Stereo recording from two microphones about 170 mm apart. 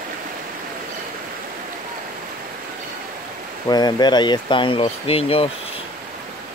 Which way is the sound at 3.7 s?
25° left (ahead or behind).